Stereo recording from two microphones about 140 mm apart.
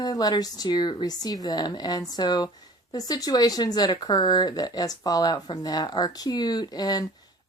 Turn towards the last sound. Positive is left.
turn(degrees=30)  # may be behind; listen again after turning